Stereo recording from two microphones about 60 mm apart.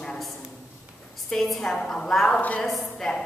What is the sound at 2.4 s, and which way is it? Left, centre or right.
Speech, left.